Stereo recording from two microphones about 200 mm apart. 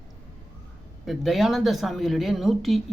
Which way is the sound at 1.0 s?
Centre (ahead or behind).